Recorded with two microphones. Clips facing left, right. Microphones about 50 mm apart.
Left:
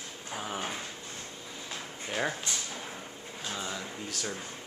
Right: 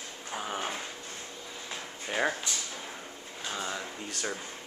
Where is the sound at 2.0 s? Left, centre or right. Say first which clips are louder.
Right 3 dB; centre.